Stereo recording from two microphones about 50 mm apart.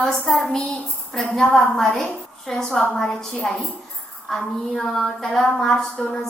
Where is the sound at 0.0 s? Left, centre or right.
Centre.